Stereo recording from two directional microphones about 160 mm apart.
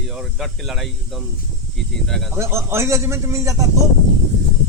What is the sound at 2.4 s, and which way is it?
A man's voice, 15° right (ahead or behind).